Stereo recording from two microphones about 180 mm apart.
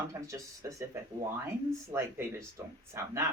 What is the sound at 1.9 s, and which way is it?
Speech, 15° right (ahead or behind).